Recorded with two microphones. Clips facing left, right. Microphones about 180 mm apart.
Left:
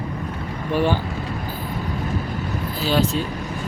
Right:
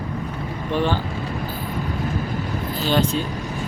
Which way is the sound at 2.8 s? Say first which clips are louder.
Even; 5° left (ahead or behind).